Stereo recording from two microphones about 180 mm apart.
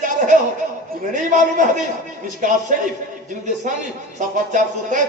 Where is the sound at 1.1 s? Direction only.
45° right (ahead or behind).